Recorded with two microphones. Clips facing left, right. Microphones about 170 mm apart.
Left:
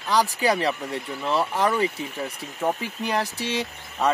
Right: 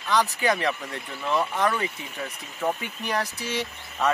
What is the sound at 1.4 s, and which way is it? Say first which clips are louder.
Speech: left 2 dB; 10° left (ahead or behind).